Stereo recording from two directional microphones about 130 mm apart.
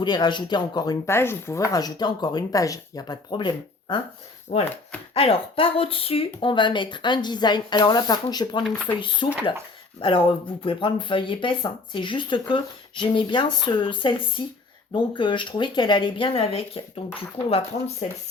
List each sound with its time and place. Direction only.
0.0 s speech: 35° left (ahead or behind)
1.1 s speech: 20° left (ahead or behind); by 4.0 s 40° left (ahead or behind)
4.5 s speech: 60° left (ahead or behind)
5.1 s speech: 45° left (ahead or behind); by 8.6 s 30° left (ahead or behind)
9.2 s speech: 40° left (ahead or behind)